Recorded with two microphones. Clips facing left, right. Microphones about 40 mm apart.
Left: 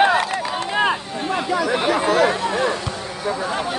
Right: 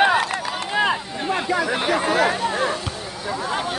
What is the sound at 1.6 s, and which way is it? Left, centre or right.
Speech, centre.